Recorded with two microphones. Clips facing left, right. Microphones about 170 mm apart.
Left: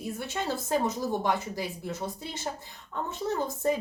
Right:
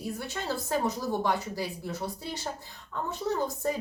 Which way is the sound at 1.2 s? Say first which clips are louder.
Even; 20° left (ahead or behind).